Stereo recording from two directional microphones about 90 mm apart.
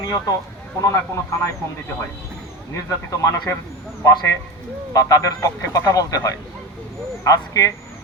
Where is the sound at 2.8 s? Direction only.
35° left (ahead or behind).